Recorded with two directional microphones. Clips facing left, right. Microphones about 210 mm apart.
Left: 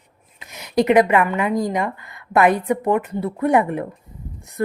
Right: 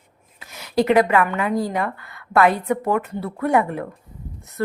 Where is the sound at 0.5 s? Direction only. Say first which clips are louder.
Left 2 dB; 20° left (ahead or behind).